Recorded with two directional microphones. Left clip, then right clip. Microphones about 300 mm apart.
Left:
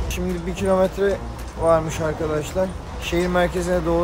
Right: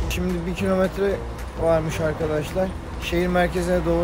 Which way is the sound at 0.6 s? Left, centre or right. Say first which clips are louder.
Left 3 dB; centre.